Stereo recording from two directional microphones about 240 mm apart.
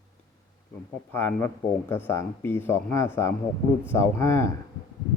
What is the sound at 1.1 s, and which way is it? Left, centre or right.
Speech, centre.